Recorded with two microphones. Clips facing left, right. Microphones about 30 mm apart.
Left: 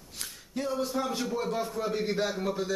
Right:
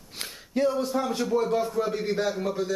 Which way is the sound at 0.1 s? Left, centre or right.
Right.